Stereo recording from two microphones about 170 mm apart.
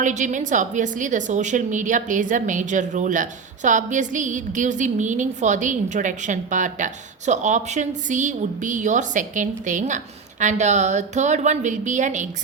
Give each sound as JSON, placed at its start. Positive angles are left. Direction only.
{"t": 0.0, "sound": "a woman's voice", "side_deg": -45}